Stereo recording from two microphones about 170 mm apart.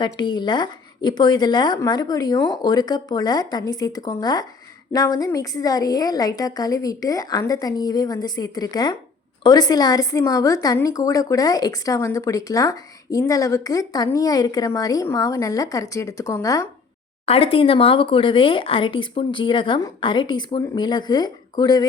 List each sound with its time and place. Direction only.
0.0 s a woman's voice: 25° left (ahead or behind)
17.2 s a woman's voice: 35° left (ahead or behind)